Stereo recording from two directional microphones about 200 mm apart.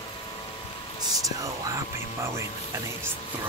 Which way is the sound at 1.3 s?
15° right (ahead or behind).